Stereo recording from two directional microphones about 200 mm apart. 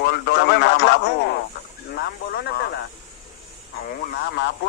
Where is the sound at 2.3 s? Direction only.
50° left (ahead or behind).